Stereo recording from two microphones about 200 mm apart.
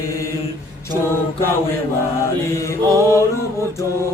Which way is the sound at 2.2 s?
15° left (ahead or behind).